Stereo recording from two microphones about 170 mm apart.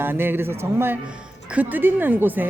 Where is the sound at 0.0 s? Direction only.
10° right (ahead or behind).